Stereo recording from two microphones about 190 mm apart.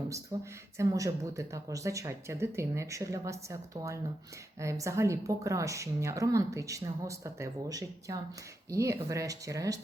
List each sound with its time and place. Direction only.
0.3 s a woman's voice: 20° right (ahead or behind)